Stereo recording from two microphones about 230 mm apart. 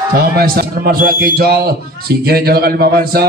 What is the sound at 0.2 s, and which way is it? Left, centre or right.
A man's voice, right.